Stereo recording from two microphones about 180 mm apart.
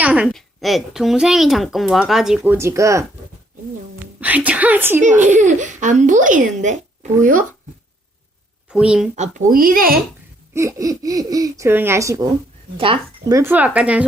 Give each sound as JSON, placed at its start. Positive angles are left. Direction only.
{"t": 0.0, "sound": "speech", "side_deg": -5}
{"t": 4.2, "sound": "speech", "side_deg": -10}
{"t": 4.9, "sound": "a child's voice", "side_deg": -45}
{"t": 8.7, "sound": "speech", "side_deg": -5}
{"t": 9.1, "sound": "a child's voice", "side_deg": -40}
{"t": 10.5, "sound": "speech", "side_deg": -15}
{"t": 12.7, "sound": "speech", "side_deg": -30}
{"t": 13.3, "sound": "speech", "side_deg": -10}